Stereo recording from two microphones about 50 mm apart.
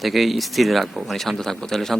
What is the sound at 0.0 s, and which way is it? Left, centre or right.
Speech, centre.